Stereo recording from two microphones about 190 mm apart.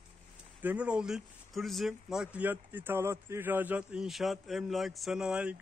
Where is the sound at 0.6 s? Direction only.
5° right (ahead or behind).